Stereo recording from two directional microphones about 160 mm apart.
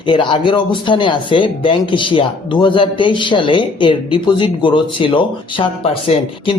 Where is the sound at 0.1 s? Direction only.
30° left (ahead or behind).